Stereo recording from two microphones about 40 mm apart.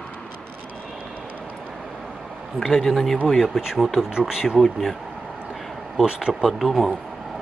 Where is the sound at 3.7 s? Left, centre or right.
Centre.